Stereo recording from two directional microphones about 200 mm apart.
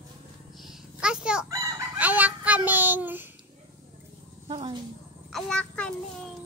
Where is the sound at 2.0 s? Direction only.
10° right (ahead or behind).